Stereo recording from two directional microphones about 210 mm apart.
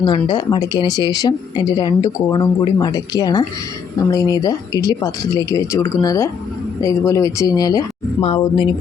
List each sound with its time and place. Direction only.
0.0 s speech: 20° left (ahead or behind)